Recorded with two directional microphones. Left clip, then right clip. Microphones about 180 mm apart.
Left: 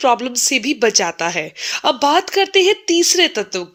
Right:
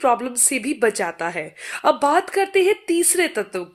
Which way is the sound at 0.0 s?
25° left (ahead or behind).